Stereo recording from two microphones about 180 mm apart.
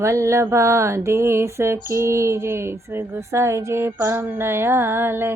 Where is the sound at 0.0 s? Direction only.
15° right (ahead or behind).